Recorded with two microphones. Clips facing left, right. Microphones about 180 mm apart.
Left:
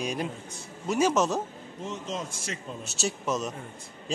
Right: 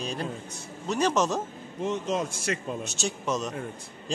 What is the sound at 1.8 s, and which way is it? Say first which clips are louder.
Speech: right 7 dB; 65° right (ahead or behind).